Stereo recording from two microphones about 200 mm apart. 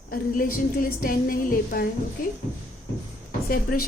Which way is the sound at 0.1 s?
45° left (ahead or behind).